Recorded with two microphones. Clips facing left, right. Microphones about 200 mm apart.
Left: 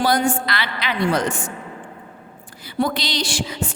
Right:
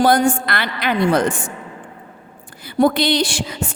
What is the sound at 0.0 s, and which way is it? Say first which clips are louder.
A woman's voice: right 4 dB; 50° right (ahead or behind).